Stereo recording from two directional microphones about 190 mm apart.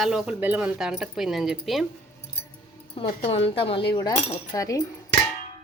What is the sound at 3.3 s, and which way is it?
Speech, 30° left (ahead or behind).